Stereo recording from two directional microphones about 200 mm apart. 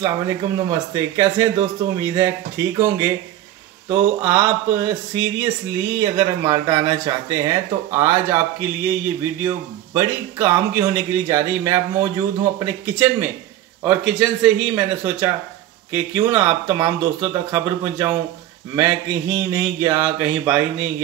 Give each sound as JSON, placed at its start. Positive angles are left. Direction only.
{"t": 0.0, "sound": "speech", "side_deg": -15}